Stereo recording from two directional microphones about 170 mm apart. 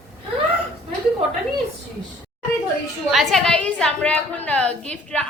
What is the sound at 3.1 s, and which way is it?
A woman's voice, centre (ahead or behind).